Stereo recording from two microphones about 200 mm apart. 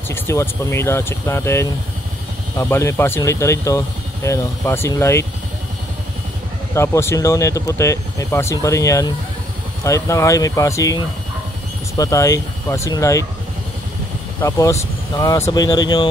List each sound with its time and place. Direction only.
0.1 s speech: 15° left (ahead or behind)
6.7 s speech: 15° left (ahead or behind)
12.0 s speech: 15° left (ahead or behind)
14.4 s speech: 15° left (ahead or behind)